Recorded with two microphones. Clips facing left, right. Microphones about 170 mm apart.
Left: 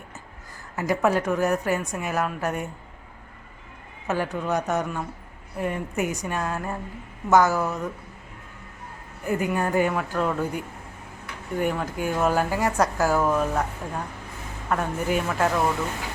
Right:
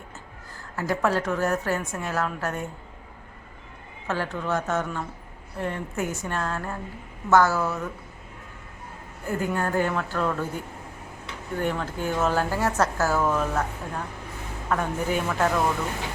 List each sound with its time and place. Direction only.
0.8 s speech: 15° left (ahead or behind)
4.0 s speech: 15° left (ahead or behind)
9.2 s speech: 15° left (ahead or behind)